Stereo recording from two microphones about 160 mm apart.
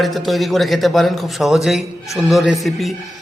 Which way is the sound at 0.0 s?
Centre (ahead or behind).